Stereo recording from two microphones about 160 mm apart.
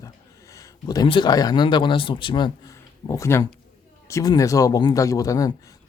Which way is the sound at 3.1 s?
15° left (ahead or behind).